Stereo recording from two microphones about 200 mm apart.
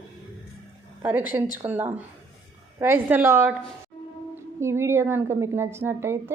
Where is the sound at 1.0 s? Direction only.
10° right (ahead or behind).